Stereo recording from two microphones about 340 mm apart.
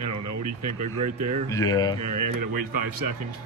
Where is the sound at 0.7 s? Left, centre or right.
Right.